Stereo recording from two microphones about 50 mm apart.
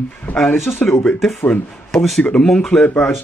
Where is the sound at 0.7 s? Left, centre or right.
Left.